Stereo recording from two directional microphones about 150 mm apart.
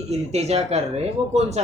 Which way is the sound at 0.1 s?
45° right (ahead or behind).